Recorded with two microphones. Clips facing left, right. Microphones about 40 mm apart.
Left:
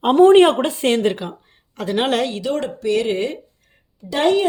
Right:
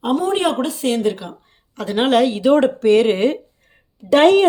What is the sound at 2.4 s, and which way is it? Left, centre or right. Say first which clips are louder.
Speech: right 8 dB; right.